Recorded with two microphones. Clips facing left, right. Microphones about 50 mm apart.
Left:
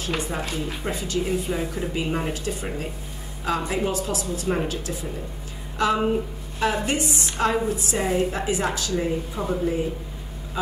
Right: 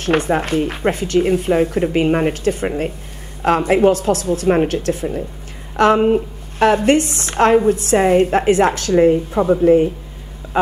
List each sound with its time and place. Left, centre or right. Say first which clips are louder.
0.0 s a woman's voice: right 11 dB; right